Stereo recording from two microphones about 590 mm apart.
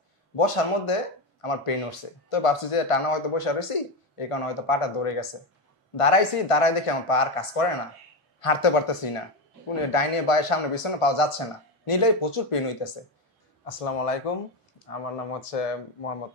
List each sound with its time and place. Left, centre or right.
1.4 s speech: left
13.7 s speech: left